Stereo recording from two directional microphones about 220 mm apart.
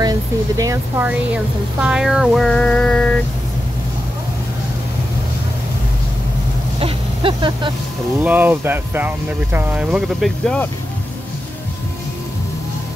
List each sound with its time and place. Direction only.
0.6 s speech: 10° right (ahead or behind); by 3.2 s 5° left (ahead or behind)
6.8 s speech: 20° right (ahead or behind)
8.2 s speech: 10° right (ahead or behind)